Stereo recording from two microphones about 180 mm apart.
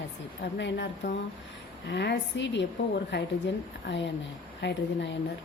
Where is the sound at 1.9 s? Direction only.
75° left (ahead or behind).